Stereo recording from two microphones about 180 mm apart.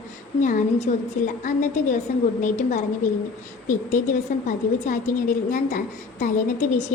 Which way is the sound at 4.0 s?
45° left (ahead or behind).